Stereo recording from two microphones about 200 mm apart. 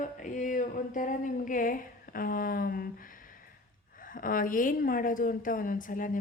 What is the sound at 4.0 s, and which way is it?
Speech, 45° left (ahead or behind).